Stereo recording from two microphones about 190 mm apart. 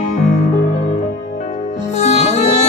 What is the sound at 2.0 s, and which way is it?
Music, 40° left (ahead or behind).